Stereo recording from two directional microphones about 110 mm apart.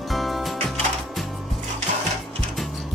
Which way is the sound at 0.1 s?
Centre (ahead or behind).